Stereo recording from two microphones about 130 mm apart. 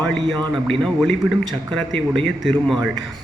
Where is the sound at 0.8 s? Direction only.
Centre (ahead or behind).